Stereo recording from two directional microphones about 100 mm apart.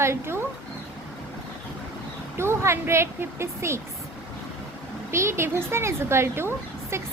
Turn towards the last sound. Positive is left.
turn(degrees=-25)  # may be behind; listen again after turning